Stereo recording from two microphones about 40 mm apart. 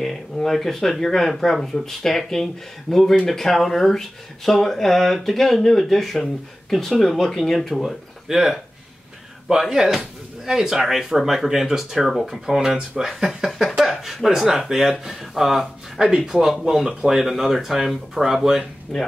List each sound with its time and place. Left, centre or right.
0.0 s speech: centre
7.8 s speech: centre
13.5 s speech: centre
18.9 s speech: centre